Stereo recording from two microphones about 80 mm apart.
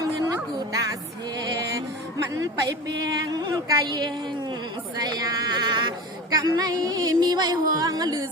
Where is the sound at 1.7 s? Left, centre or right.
Right.